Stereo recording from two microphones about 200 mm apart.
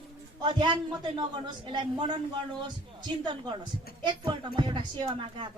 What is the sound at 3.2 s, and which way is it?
Speech, 25° right (ahead or behind).